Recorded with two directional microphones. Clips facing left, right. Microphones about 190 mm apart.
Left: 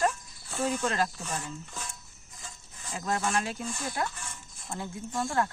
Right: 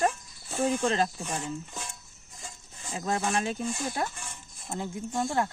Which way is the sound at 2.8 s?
20° right (ahead or behind).